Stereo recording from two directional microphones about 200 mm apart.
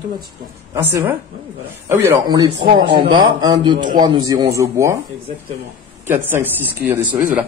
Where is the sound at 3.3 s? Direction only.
20° right (ahead or behind).